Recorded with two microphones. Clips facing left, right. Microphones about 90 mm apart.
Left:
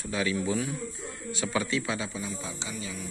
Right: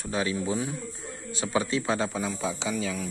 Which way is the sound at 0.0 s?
35° right (ahead or behind).